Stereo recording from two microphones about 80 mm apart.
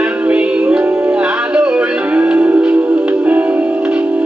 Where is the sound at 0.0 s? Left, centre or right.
Centre.